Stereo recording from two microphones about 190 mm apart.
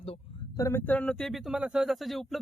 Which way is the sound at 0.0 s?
30° left (ahead or behind).